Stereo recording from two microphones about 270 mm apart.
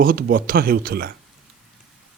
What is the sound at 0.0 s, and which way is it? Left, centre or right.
Speech, right.